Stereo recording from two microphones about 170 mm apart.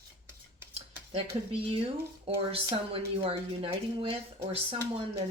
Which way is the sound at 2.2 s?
35° right (ahead or behind).